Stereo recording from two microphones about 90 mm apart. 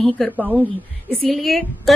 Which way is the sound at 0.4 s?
20° right (ahead or behind).